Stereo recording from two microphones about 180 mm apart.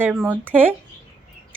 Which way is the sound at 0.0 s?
10° right (ahead or behind).